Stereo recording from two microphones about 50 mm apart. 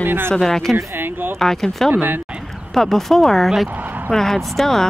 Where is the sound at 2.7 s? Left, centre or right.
Centre.